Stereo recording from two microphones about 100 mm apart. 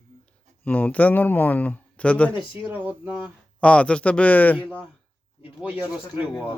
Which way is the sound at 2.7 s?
15° right (ahead or behind).